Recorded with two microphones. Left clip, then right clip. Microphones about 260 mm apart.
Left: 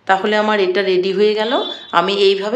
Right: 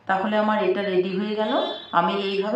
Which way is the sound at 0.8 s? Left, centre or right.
Left.